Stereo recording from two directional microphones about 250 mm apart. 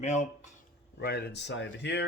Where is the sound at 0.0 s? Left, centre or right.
Left.